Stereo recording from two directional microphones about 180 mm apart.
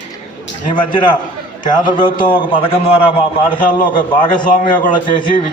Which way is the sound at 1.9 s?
25° left (ahead or behind).